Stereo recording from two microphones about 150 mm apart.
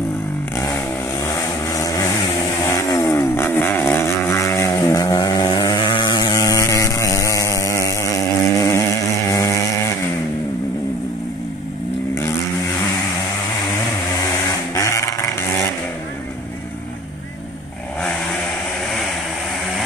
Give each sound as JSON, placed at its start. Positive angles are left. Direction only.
{"t": 1.2, "sound": "vehicle", "side_deg": 20}
{"t": 2.7, "sound": "chainsaw", "side_deg": 20}
{"t": 14.2, "sound": "vehicle", "side_deg": 20}